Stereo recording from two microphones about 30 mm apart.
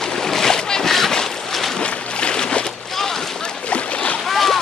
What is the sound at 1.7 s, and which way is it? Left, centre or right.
Boat, left.